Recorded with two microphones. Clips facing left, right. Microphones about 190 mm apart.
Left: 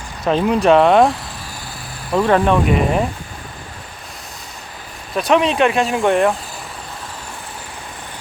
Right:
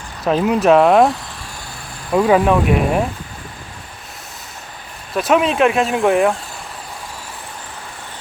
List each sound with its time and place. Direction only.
0.3 s speech: 5° right (ahead or behind)
2.1 s speech: 5° right (ahead or behind)
5.1 s speech: 5° right (ahead or behind)